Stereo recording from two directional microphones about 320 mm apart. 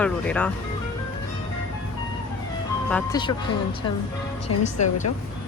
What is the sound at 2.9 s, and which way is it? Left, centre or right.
Speech, centre.